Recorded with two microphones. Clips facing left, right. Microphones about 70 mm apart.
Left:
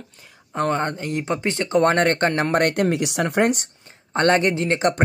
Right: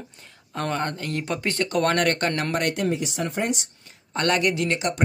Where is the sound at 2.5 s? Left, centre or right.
Left.